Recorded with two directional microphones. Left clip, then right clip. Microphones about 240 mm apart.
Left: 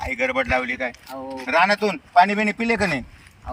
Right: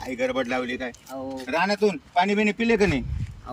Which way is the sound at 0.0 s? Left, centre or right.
Centre.